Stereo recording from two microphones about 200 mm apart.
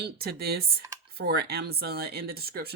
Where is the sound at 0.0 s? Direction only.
50° right (ahead or behind).